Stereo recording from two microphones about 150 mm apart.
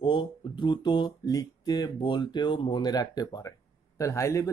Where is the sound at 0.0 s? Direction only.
35° left (ahead or behind).